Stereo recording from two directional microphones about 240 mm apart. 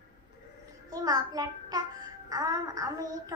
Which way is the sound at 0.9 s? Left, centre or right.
Centre.